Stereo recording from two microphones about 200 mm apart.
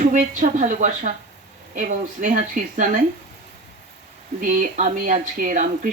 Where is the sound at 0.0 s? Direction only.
40° right (ahead or behind).